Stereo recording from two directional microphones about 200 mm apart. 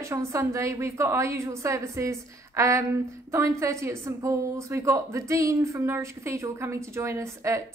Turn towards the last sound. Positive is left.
turn(degrees=-15)  # may be behind; listen again after turning